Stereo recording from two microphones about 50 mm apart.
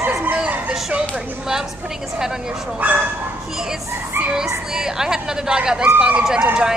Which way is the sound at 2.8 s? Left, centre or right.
Right.